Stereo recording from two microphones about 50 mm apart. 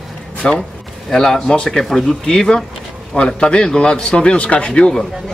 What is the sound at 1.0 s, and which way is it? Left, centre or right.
Speech, centre.